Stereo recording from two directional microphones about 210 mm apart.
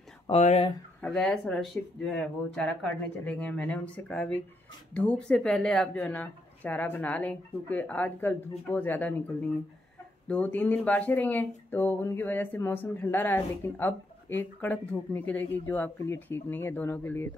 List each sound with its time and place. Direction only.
0.3 s speech: 30° left (ahead or behind)
1.0 s speech: 5° left (ahead or behind)